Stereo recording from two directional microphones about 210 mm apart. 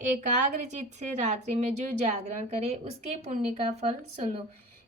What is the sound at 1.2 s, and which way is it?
A woman's voice, 35° right (ahead or behind).